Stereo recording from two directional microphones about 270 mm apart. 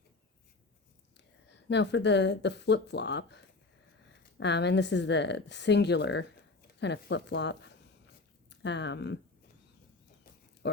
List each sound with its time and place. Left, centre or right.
1.1 s speech: left